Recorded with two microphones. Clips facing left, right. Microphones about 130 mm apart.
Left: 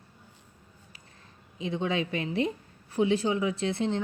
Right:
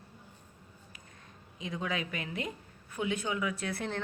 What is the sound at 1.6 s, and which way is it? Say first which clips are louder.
A woman's voice: left 6 dB; 30° left (ahead or behind).